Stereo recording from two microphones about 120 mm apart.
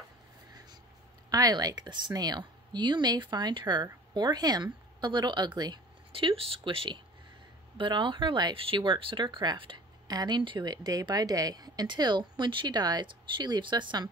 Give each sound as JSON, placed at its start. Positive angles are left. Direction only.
{"t": 1.3, "sound": "speech", "side_deg": -30}
{"t": 6.1, "sound": "speech", "side_deg": -50}